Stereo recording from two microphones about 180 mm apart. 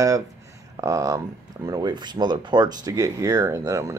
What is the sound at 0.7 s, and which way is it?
Speech, 20° right (ahead or behind).